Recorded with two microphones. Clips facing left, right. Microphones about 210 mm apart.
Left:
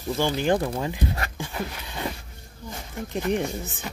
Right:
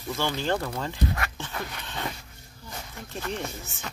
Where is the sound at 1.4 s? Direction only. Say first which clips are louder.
Left 4 dB; 10° left (ahead or behind).